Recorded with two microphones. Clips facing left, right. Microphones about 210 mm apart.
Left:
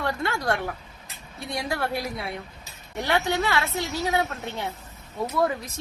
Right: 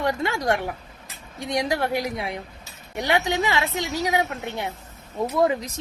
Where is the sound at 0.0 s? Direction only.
15° right (ahead or behind).